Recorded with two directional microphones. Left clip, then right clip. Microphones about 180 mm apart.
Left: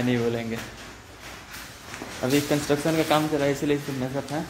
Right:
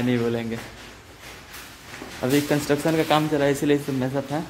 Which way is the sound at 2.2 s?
45° right (ahead or behind).